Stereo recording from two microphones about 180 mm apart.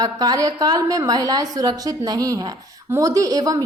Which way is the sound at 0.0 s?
20° right (ahead or behind).